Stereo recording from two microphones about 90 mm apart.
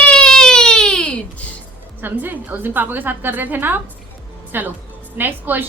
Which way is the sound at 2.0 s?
20° right (ahead or behind).